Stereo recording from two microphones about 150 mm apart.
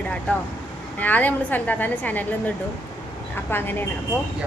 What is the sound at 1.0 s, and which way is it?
A woman's voice, 10° left (ahead or behind).